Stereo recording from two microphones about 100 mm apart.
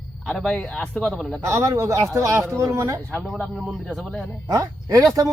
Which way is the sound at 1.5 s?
30° right (ahead or behind).